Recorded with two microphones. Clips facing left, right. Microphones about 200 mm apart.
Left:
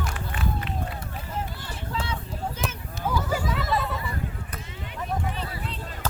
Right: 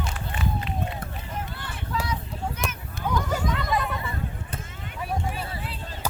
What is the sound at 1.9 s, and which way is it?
Vehicle, 30° left (ahead or behind).